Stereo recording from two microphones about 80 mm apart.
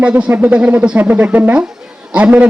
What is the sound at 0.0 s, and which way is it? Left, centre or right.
Speech, centre.